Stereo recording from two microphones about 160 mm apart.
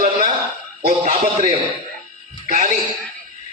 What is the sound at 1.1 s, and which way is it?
Speech, 45° right (ahead or behind).